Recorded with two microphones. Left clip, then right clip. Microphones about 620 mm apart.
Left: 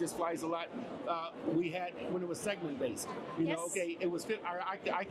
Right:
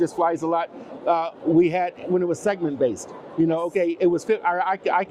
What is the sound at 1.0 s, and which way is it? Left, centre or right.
Speech, right.